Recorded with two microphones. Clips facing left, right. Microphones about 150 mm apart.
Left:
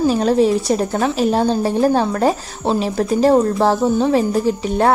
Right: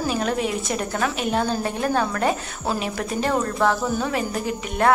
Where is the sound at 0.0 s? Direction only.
30° left (ahead or behind).